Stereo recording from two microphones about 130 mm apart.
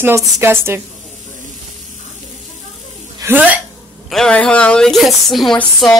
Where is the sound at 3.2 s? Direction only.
15° right (ahead or behind).